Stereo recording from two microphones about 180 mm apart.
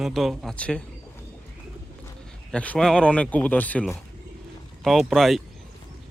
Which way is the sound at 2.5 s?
5° left (ahead or behind).